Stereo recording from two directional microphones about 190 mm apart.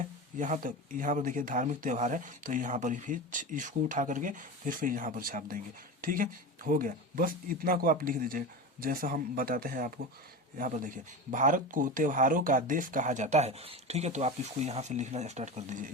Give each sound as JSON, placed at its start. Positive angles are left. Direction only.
{"t": 0.0, "sound": "speech", "side_deg": -40}